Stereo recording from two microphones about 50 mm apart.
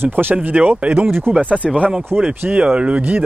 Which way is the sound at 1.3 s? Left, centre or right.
Right.